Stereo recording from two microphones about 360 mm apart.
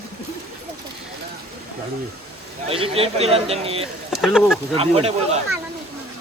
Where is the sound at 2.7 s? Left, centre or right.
Centre.